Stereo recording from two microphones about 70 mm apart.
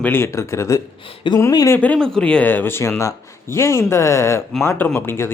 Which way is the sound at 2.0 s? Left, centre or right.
Centre.